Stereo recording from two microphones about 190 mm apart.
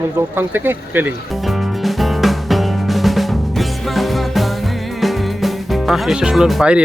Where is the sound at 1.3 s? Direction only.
Centre (ahead or behind).